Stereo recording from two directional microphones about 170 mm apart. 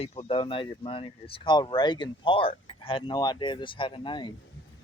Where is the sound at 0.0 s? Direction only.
35° left (ahead or behind).